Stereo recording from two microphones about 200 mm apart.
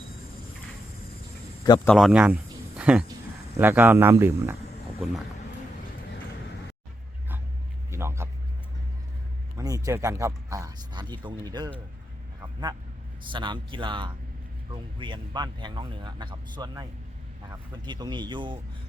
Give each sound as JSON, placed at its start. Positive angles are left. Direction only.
{"t": 1.6, "sound": "a man's voice", "side_deg": 20}
{"t": 1.9, "sound": "speech", "side_deg": 0}
{"t": 7.9, "sound": "a sound", "side_deg": -15}
{"t": 9.6, "sound": "speech", "side_deg": -15}
{"t": 12.4, "sound": "quack", "side_deg": -20}
{"t": 13.3, "sound": "speech", "side_deg": -25}